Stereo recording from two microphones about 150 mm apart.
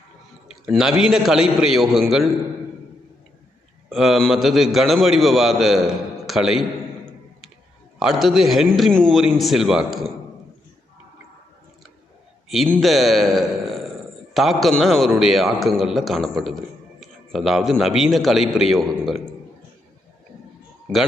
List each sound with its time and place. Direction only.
0.6 s a man's voice: 5° right (ahead or behind)
3.8 s a man's voice: centre (ahead or behind)
7.9 s a man's voice: centre (ahead or behind)
12.8 s a man's voice: centre (ahead or behind)